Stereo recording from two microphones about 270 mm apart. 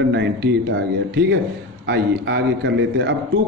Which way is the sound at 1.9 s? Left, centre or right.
Right.